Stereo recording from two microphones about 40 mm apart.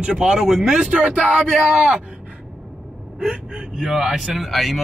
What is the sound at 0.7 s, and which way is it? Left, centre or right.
Speech, right.